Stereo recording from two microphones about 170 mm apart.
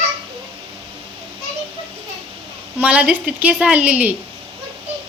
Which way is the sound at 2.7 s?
10° right (ahead or behind).